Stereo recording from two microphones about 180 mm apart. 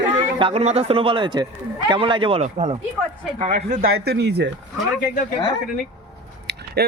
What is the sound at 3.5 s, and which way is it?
Speech, 55° right (ahead or behind).